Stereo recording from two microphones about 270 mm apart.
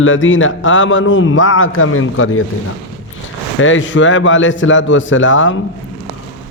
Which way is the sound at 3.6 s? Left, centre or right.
Left.